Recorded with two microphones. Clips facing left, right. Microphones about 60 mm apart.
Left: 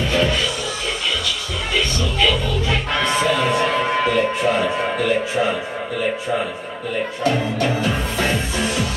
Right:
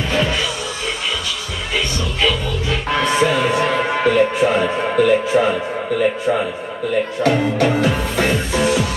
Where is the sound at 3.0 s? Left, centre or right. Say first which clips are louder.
Right 3 dB; centre.